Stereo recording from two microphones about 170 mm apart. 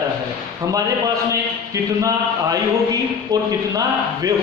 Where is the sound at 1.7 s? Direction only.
20° right (ahead or behind).